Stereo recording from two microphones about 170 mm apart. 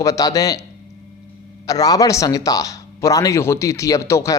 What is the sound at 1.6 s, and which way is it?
A man's voice, 20° left (ahead or behind).